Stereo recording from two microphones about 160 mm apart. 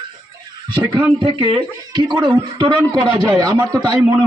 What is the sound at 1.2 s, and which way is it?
A man's voice, 30° right (ahead or behind).